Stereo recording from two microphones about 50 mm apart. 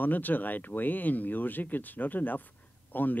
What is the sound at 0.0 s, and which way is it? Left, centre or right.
Speech, left.